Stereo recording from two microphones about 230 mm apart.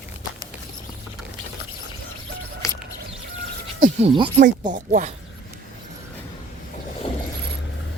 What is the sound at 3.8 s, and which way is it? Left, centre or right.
Speech, right.